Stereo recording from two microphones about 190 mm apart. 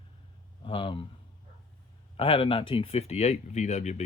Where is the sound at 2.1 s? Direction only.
30° left (ahead or behind).